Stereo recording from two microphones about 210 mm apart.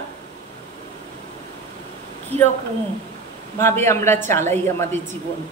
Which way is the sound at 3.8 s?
10° left (ahead or behind).